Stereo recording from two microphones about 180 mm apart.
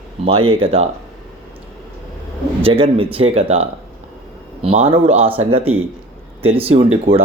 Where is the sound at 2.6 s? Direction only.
30° right (ahead or behind).